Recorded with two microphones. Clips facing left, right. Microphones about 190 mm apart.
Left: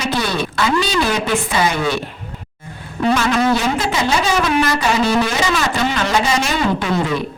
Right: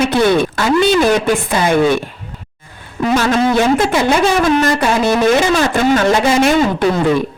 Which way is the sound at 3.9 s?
55° right (ahead or behind).